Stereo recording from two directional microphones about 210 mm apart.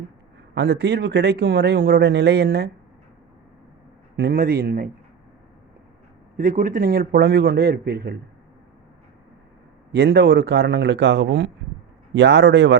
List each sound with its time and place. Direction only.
0.5 s speech: 55° right (ahead or behind)
4.2 s speech: 45° right (ahead or behind)
6.3 s speech: 40° right (ahead or behind)
9.9 s speech: 55° right (ahead or behind)